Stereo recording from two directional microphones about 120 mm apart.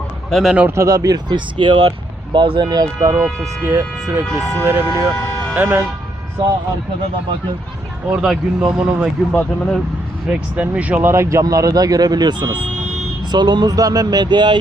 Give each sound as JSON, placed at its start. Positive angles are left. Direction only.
{"t": 0.3, "sound": "speech", "side_deg": 5}
{"t": 0.8, "sound": "speech", "side_deg": -30}
{"t": 8.1, "sound": "speech", "side_deg": -5}
{"t": 9.3, "sound": "speech", "side_deg": 10}
{"t": 10.2, "sound": "speech", "side_deg": -10}